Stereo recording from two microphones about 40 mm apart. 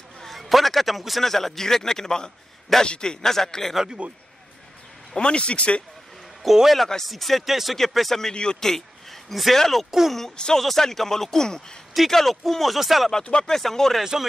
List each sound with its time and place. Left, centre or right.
0.2 s a man's voice: centre
4.0 s a man's voice: right
5.1 s speech: left
6.4 s a man's voice: centre
7.1 s speech: centre
8.2 s speech: left
8.6 s a sound: centre
9.6 s speech: centre
9.8 s a man's voice: centre
10.3 s speech: left
10.6 s speech: centre
11.9 s speech: centre
13.2 s speech: left
13.5 s speech: centre